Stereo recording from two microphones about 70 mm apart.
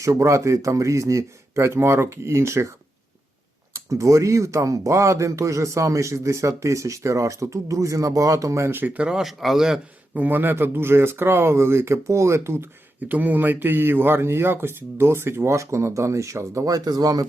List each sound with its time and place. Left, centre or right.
0.1 s speech: right
3.8 s speech: right
8.8 s speech: right
9.0 s a man's voice: centre
10.2 s speech: right
13.1 s speech: right